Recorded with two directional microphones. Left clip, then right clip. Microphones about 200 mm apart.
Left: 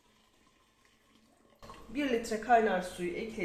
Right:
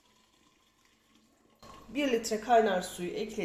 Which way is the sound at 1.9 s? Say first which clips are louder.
Right 2 dB; 25° right (ahead or behind).